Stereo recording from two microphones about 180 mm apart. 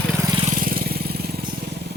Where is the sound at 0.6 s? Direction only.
55° right (ahead or behind).